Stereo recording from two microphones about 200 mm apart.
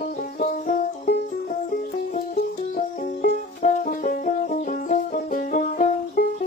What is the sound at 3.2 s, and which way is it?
Music, 45° left (ahead or behind).